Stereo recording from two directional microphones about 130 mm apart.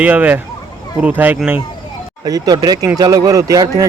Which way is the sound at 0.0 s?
10° right (ahead or behind).